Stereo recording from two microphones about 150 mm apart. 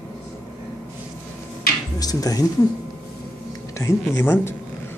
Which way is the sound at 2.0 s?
25° left (ahead or behind).